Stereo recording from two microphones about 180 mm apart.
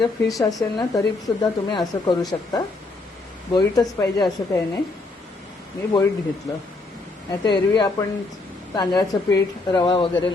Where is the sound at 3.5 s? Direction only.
20° left (ahead or behind).